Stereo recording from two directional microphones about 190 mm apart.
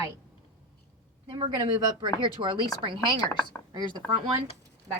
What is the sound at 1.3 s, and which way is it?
Speech, 30° right (ahead or behind).